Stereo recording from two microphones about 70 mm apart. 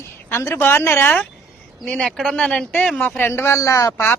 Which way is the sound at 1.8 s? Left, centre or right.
Centre.